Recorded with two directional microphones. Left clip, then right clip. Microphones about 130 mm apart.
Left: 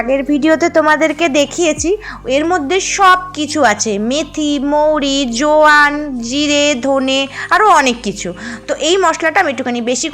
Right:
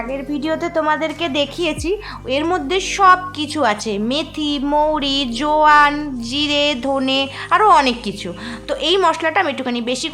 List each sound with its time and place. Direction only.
0.1 s a woman's voice: 35° left (ahead or behind)
4.6 s child singing: centre (ahead or behind)
4.9 s a woman's voice: 25° left (ahead or behind)